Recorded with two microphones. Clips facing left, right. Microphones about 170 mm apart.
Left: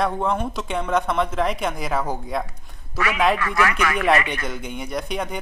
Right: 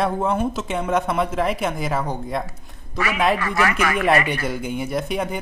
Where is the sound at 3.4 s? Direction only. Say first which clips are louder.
Right 1 dB; 30° right (ahead or behind).